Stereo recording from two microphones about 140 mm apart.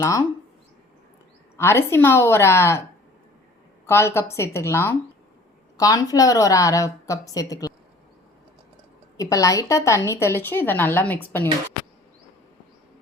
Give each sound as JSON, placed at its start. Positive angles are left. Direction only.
{"t": 0.0, "sound": "a woman's voice", "side_deg": 25}
{"t": 1.5, "sound": "a woman's voice", "side_deg": 20}
{"t": 3.8, "sound": "a woman's voice", "side_deg": 20}
{"t": 9.1, "sound": "a woman's voice", "side_deg": 25}